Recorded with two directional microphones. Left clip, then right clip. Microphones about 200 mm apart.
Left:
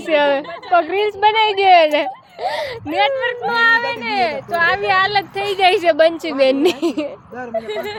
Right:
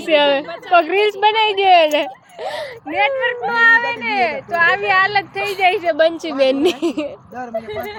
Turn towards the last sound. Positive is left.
turn(degrees=0)  # may be behind; listen again after turning